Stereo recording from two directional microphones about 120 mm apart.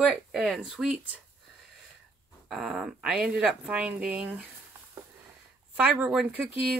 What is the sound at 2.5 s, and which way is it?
Speech, 5° right (ahead or behind).